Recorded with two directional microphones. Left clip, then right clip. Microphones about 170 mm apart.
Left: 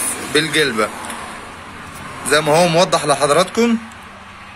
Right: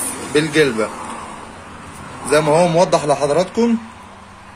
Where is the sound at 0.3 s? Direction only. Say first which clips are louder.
Right 1 dB; 5° right (ahead or behind).